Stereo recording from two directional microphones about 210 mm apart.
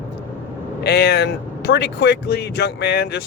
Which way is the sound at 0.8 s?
50° left (ahead or behind).